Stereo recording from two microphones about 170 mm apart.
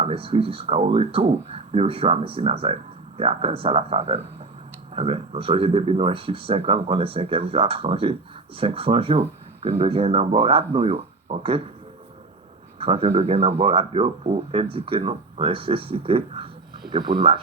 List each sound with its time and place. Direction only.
0.0 s speech: 35° right (ahead or behind)
12.8 s speech: 35° right (ahead or behind)